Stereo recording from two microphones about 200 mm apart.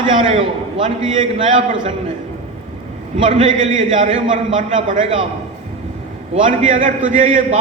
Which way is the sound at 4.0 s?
40° right (ahead or behind).